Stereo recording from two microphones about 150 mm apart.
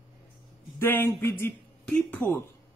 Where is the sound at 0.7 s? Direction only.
15° left (ahead or behind).